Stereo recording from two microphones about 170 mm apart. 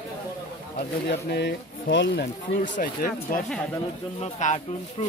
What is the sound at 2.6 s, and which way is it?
Speech, 55° left (ahead or behind).